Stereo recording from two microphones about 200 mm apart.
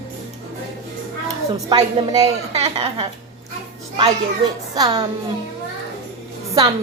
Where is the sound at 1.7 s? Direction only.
20° right (ahead or behind).